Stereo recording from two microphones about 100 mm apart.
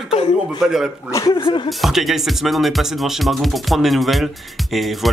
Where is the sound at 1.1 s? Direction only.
35° left (ahead or behind).